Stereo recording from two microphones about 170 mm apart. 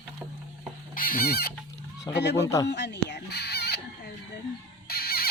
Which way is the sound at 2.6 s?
90° left.